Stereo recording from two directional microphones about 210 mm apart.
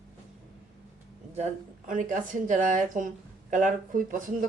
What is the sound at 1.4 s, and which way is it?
Speech, 35° right (ahead or behind).